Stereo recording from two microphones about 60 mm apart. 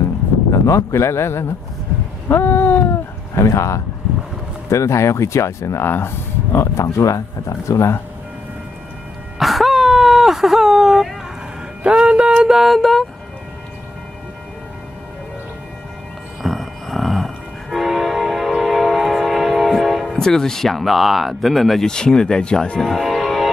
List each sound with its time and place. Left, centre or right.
0.5 s speech: left
2.2 s a sound: left
3.3 s speech: left
5.9 s speech: left
7.0 s speech: left
9.4 s a sound: centre
11.8 s speech: centre
12.4 s speech: centre
16.4 s train horn: centre
20.2 s speech: centre